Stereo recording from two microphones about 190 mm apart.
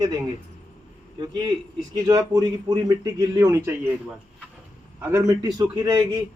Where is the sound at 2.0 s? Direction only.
20° right (ahead or behind).